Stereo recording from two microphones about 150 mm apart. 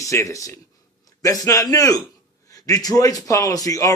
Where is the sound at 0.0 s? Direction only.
20° left (ahead or behind).